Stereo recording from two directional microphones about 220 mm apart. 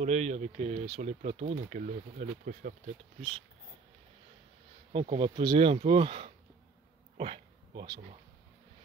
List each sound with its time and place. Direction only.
0.0 s speech: 30° right (ahead or behind)
4.9 s speech: 25° right (ahead or behind)
7.2 s a sound: 25° right (ahead or behind)